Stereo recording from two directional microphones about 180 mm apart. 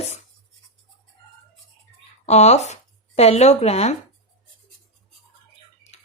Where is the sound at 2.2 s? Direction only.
40° left (ahead or behind).